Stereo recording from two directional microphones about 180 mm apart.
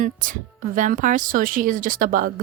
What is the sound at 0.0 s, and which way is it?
Speech, 45° right (ahead or behind).